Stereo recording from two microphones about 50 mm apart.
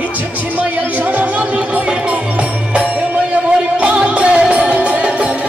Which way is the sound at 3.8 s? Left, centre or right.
Right.